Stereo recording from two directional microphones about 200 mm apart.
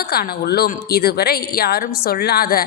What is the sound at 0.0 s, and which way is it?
A woman's voice, 50° left (ahead or behind).